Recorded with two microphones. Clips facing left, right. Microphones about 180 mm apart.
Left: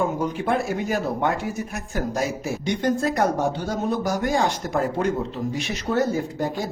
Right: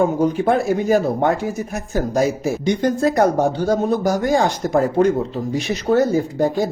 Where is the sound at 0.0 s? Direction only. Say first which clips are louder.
Right 7 dB; 40° right (ahead or behind).